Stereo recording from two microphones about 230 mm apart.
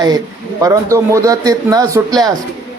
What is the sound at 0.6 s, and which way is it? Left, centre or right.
Speech, centre.